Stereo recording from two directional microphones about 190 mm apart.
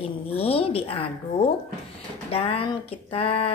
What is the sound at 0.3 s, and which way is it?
Speech, 30° left (ahead or behind).